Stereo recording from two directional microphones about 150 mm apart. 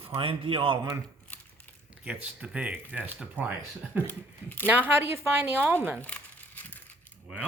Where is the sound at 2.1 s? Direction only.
10° right (ahead or behind).